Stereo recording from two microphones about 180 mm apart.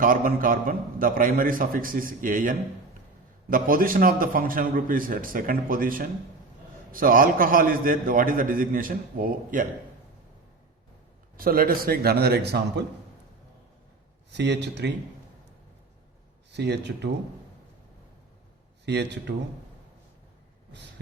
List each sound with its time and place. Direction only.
0.0 s a man's voice: 50° right (ahead or behind)
11.3 s speech: 55° right (ahead or behind)
14.3 s speech: 70° right (ahead or behind)
16.5 s speech: 70° right (ahead or behind)
18.9 s speech: 70° right (ahead or behind)